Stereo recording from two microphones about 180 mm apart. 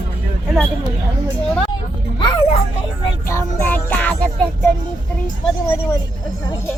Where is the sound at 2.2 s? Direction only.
25° left (ahead or behind).